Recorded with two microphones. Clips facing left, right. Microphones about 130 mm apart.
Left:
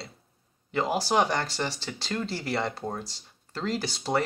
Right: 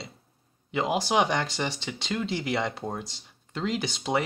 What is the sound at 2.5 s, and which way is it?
Speech, centre (ahead or behind).